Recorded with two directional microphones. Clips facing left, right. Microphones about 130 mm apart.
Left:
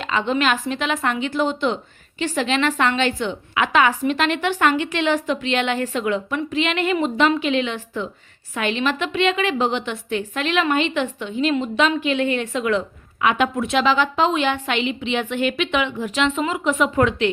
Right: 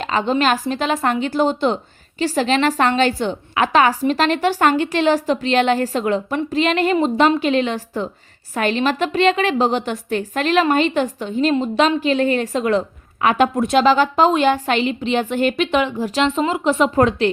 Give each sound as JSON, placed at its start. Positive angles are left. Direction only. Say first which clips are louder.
{"t": 0.0, "sound": "a woman's voice", "louder": "right 3 dB", "side_deg": -40}